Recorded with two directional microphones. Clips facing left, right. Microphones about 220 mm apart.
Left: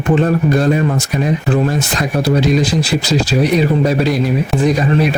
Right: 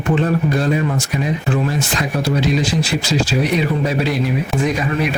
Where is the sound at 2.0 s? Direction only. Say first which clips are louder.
Left 5 dB; 40° left (ahead or behind).